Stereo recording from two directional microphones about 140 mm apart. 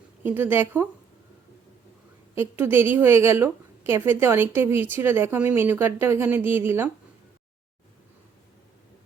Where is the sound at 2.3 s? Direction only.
15° right (ahead or behind).